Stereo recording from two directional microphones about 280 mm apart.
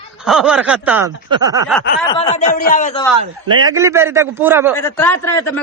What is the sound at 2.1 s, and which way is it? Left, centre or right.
Speech, centre.